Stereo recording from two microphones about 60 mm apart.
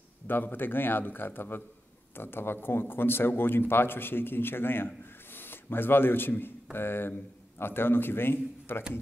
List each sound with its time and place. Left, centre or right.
0.3 s a man's voice: left